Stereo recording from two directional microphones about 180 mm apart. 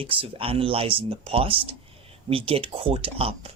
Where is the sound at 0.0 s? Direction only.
30° right (ahead or behind).